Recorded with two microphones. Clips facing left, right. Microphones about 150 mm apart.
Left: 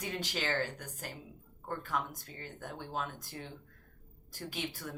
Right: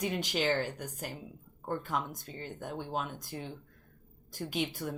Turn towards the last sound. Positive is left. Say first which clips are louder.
# right 6 dB
turn(degrees=-20)  # may be behind; listen again after turning